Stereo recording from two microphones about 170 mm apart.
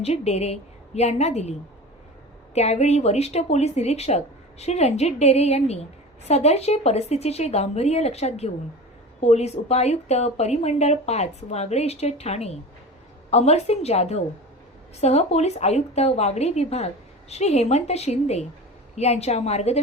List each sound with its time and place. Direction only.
0.0 s a woman's voice: 40° left (ahead or behind)
2.6 s a woman's voice: 40° left (ahead or behind)